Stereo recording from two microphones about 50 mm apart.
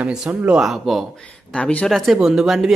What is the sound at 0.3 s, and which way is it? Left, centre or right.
Speech, right.